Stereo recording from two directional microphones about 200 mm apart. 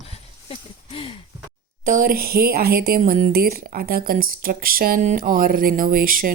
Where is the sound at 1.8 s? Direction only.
40° right (ahead or behind).